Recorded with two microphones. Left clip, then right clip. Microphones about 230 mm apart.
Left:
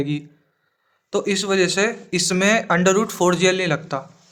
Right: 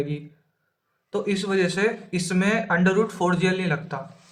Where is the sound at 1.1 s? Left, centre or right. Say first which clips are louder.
Left 4 dB; left.